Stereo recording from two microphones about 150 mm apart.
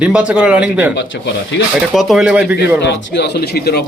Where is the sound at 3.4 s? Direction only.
90° left.